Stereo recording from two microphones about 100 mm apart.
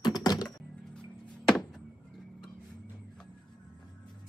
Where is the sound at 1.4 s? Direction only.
Centre (ahead or behind).